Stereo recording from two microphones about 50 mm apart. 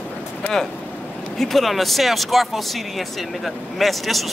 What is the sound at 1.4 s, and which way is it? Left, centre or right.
Speech, centre.